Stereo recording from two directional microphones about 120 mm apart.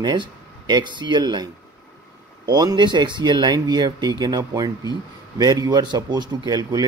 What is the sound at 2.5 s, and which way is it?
Speech, 35° right (ahead or behind).